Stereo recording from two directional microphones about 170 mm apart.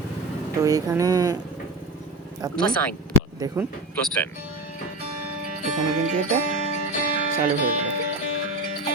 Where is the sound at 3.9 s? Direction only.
10° left (ahead or behind).